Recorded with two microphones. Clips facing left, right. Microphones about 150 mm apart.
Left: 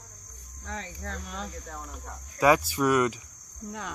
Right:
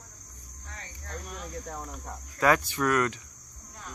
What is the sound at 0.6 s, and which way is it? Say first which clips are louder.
Cricket: left 9 dB; 90° left.